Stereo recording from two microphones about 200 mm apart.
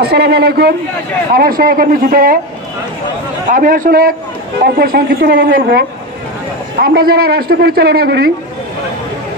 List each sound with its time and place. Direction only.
0.0 s a man's voice: 55° right (ahead or behind)
3.5 s a man's voice: 40° right (ahead or behind)